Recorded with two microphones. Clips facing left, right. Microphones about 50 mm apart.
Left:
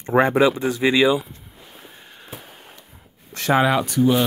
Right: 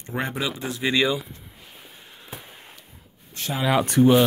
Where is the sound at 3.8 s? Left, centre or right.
Right.